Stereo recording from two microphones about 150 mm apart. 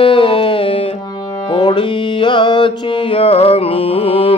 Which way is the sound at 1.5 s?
30° left (ahead or behind).